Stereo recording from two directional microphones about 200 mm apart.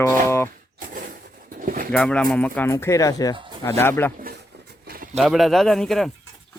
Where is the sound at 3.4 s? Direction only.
25° right (ahead or behind).